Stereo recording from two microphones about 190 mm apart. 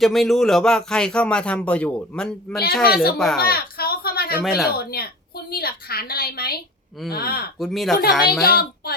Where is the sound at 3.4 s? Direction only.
50° left (ahead or behind).